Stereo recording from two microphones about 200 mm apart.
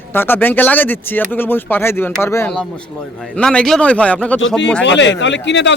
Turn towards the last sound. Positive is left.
turn(degrees=60)  # may be behind; listen again after turning